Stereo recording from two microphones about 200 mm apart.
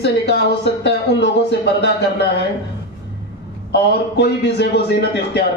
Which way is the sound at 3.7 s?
55° left (ahead or behind).